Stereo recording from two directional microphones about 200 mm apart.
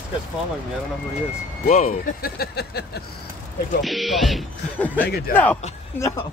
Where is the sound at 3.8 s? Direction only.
Centre (ahead or behind).